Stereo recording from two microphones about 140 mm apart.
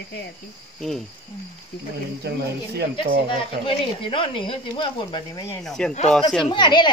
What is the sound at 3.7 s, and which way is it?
Speech, 35° left (ahead or behind).